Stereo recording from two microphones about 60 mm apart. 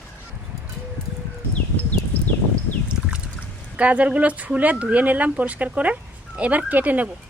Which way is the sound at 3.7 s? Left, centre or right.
Right.